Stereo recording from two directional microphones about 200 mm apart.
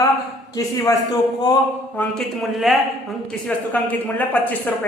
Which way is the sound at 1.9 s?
5° left (ahead or behind).